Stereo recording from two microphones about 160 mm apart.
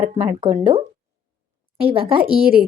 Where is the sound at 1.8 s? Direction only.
35° right (ahead or behind).